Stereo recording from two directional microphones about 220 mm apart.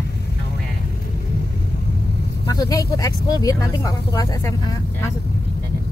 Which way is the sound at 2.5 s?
15° left (ahead or behind).